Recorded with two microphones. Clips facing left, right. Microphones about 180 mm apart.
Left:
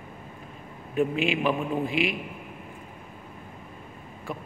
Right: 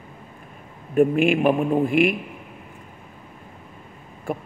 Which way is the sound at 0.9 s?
50° right (ahead or behind).